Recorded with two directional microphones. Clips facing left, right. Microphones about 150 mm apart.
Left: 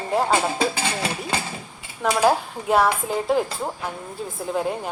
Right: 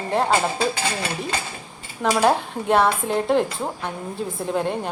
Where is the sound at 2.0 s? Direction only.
Centre (ahead or behind).